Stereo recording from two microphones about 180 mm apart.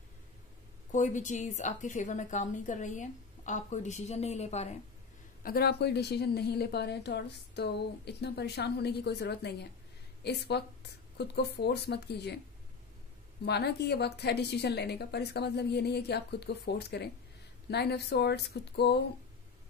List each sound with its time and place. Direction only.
0.9 s a woman's voice: 45° left (ahead or behind)
5.4 s a woman's voice: 60° left (ahead or behind)
13.5 s a woman's voice: 65° left (ahead or behind)